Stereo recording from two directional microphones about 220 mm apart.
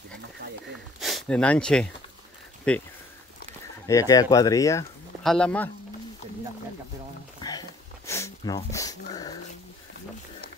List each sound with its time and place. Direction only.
0.9 s speech: centre (ahead or behind)
3.8 s speech: 15° left (ahead or behind)
5.2 s speech: 5° left (ahead or behind)
7.4 s a sound: 20° left (ahead or behind)
8.1 s speech: 15° left (ahead or behind)